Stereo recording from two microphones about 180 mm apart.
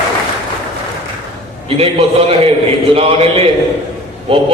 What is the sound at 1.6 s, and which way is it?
A man's voice, 30° right (ahead or behind).